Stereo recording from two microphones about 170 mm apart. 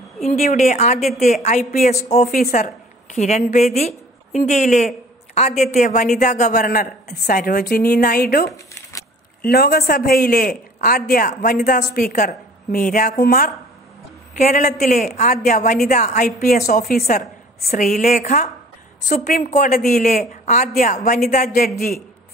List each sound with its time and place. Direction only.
0.4 s a woman's voice: 45° left (ahead or behind)
14.3 s a woman's voice: 45° left (ahead or behind)